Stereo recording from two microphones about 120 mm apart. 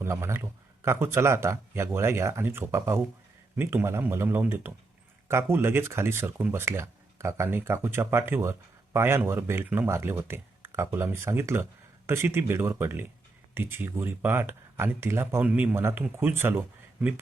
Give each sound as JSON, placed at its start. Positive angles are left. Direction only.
{"t": 0.0, "sound": "speech", "side_deg": -20}